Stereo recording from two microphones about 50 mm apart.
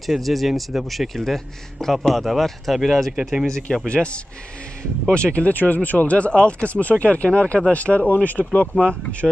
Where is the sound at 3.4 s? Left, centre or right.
Centre; by 8.4 s left.